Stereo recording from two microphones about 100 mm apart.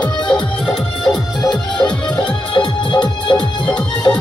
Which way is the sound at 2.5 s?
50° left (ahead or behind).